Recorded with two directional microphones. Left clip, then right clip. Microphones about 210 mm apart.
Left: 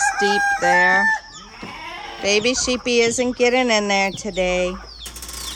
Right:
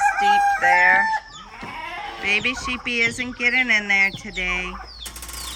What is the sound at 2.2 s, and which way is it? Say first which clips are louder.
Speech: left 3 dB; 15° left (ahead or behind).